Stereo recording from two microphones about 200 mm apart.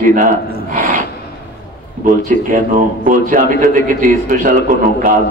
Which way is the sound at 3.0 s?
40° right (ahead or behind).